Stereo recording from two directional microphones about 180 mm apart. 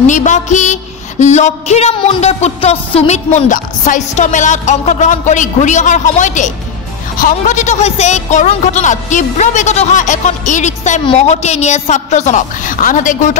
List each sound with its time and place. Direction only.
0.0 s a woman's voice: 45° left (ahead or behind)